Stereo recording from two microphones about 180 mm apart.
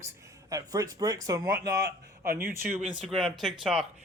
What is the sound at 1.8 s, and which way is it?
Speech, 50° right (ahead or behind).